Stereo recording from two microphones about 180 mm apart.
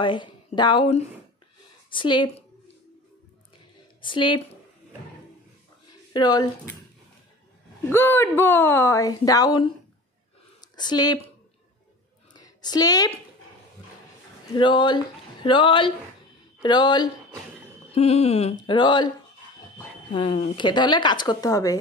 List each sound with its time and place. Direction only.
0.0 s a woman's voice: 25° left (ahead or behind)
1.9 s a woman's voice: 25° left (ahead or behind)
4.0 s a woman's voice: 25° left (ahead or behind)
6.1 s a woman's voice: 25° left (ahead or behind)
7.9 s speech: 10° left (ahead or behind)
12.4 s a woman's voice: 20° left (ahead or behind)
14.5 s a woman's voice: 25° left (ahead or behind)
17.9 s speech: 35° left (ahead or behind)
20.2 s a woman's voice: 30° left (ahead or behind)